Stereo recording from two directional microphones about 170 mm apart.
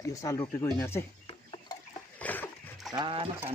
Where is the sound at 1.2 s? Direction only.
30° left (ahead or behind).